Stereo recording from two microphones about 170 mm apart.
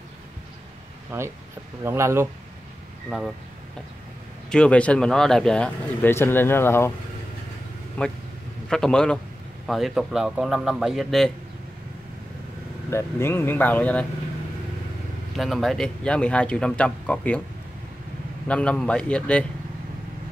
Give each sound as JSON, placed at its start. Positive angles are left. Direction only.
{"t": 1.9, "sound": "speech", "side_deg": -15}
{"t": 4.5, "sound": "speech", "side_deg": 5}
{"t": 8.0, "sound": "speech", "side_deg": 10}
{"t": 12.9, "sound": "speech", "side_deg": 15}
{"t": 15.3, "sound": "speech", "side_deg": 0}
{"t": 18.5, "sound": "speech", "side_deg": 5}